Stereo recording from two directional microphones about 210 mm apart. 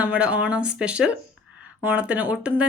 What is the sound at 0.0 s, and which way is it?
Speech, 5° right (ahead or behind).